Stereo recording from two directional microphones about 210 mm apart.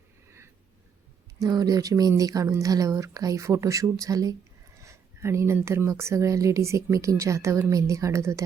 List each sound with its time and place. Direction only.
1.4 s speech: 15° right (ahead or behind)